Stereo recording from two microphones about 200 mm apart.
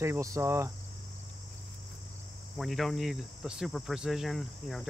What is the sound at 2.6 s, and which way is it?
Cricket, centre (ahead or behind).